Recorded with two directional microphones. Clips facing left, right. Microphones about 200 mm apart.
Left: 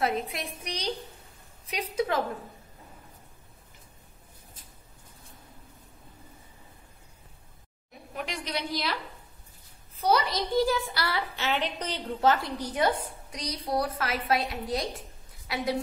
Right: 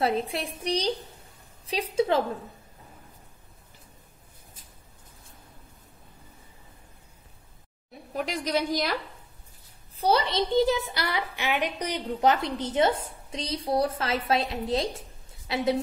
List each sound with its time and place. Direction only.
0.0 s a woman's voice: 30° right (ahead or behind)
8.1 s a woman's voice: 40° right (ahead or behind)
9.9 s a woman's voice: 30° right (ahead or behind)